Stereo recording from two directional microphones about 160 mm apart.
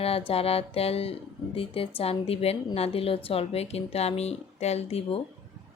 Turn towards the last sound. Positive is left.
turn(degrees=40)  # may be behind; listen again after turning